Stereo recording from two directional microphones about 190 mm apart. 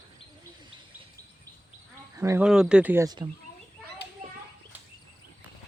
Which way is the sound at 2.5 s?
5° right (ahead or behind).